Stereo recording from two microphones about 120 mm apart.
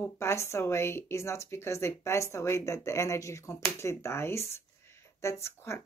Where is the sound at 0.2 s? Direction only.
25° left (ahead or behind).